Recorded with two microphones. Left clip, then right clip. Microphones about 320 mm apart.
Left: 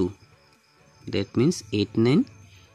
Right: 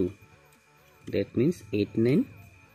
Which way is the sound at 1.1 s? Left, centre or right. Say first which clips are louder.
Left 2 dB; left.